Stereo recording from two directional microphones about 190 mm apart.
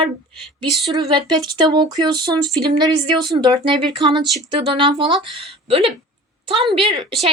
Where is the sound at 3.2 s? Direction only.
25° right (ahead or behind).